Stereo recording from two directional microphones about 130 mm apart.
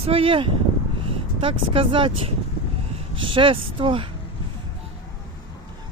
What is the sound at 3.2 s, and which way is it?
Speech, 40° right (ahead or behind).